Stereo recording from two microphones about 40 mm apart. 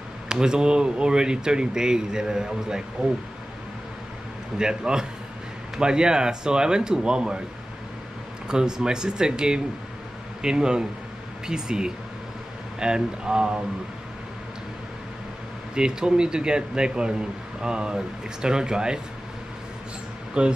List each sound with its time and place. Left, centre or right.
0.3 s speech: centre
4.6 s speech: centre
8.5 s speech: centre
15.7 s speech: right
20.4 s speech: right